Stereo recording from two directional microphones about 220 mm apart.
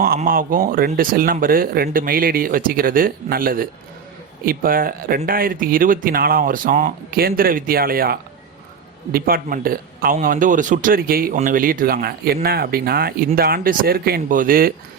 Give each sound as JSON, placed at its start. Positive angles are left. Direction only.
{"t": 0.0, "sound": "a man's voice", "side_deg": -40}